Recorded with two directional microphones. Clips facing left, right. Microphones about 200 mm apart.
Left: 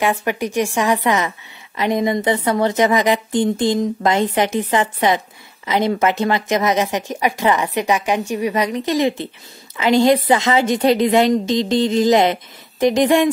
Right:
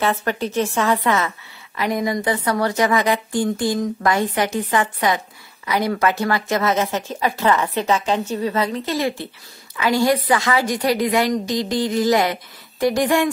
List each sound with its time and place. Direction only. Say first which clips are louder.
0.0 s a woman's voice: left 2 dB; 15° left (ahead or behind)